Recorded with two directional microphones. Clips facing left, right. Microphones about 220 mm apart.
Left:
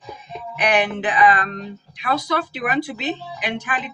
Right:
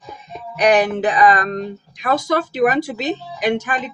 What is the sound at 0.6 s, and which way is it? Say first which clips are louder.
Speech: right 5 dB; 40° right (ahead or behind).